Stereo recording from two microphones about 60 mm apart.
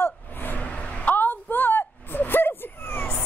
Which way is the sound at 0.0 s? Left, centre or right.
Left.